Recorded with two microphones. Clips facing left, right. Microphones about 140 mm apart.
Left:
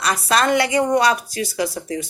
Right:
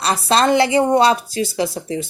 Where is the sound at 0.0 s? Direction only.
30° right (ahead or behind).